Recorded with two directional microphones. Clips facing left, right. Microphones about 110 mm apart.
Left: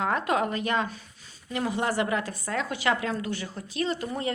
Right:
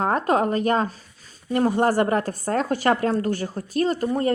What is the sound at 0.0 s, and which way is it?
A woman's voice, 40° right (ahead or behind).